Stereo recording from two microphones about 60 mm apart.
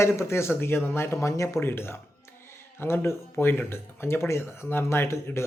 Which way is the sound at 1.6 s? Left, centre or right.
Left.